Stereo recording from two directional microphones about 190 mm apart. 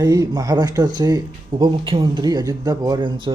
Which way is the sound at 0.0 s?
20° right (ahead or behind).